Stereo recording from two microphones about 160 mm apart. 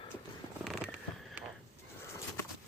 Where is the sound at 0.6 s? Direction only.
Centre (ahead or behind).